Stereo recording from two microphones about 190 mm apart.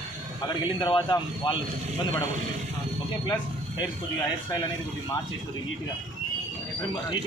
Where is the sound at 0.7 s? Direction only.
25° left (ahead or behind).